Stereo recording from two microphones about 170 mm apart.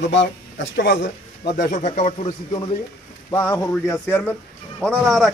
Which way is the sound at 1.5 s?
45° left (ahead or behind).